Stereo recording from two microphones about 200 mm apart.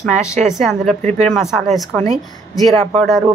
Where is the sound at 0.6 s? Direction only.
Centre (ahead or behind).